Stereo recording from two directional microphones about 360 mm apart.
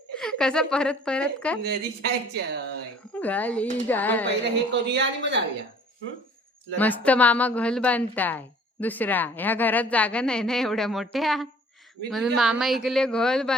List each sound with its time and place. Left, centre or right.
0.2 s a woman's voice: centre
1.6 s a woman's voice: right
3.2 s a woman's voice: centre
4.3 s a woman's voice: right
6.7 s a woman's voice: centre